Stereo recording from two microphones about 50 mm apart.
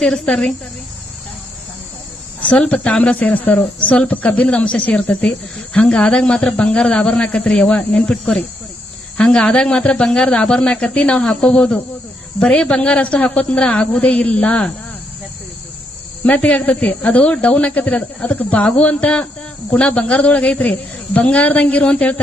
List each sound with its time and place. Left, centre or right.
0.0 s speech: centre
2.4 s a man's voice: left
16.2 s a man's voice: left